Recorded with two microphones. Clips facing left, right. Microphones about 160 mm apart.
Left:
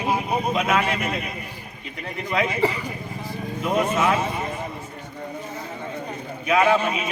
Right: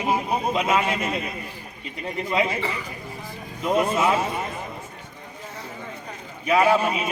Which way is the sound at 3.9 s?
10° right (ahead or behind).